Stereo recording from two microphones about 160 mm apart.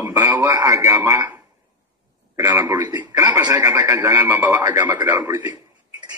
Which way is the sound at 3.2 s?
15° right (ahead or behind).